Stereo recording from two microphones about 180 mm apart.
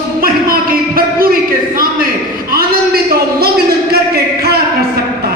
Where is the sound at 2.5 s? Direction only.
60° right (ahead or behind).